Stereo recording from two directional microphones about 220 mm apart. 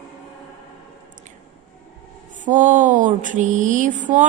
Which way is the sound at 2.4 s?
35° right (ahead or behind).